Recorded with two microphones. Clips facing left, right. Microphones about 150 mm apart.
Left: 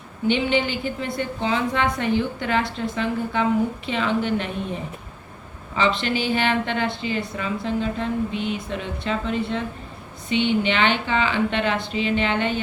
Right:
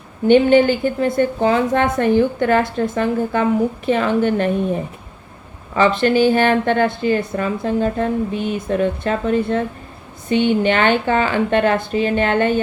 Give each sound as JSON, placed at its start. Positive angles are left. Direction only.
{"t": 0.3, "sound": "a woman's voice", "side_deg": -50}